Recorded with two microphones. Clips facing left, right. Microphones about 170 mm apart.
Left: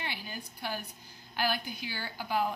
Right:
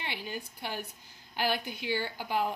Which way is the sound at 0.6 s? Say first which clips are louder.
Even; 25° right (ahead or behind).